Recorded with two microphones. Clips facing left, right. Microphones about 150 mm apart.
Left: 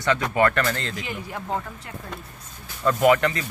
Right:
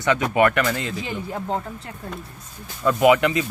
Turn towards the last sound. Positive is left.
turn(degrees=-15)  # may be behind; listen again after turning